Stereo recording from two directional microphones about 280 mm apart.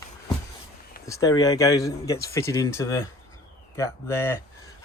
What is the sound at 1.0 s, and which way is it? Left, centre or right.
Speech, centre.